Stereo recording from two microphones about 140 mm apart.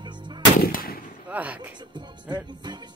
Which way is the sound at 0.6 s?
90° left.